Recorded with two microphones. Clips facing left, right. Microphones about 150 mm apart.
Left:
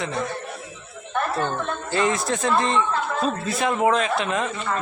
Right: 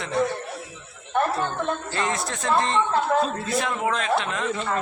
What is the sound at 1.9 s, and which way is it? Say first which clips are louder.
A man's voice: left 5 dB; 5° left (ahead or behind).